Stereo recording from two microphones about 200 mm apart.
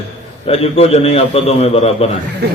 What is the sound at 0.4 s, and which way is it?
A man's voice, 30° left (ahead or behind).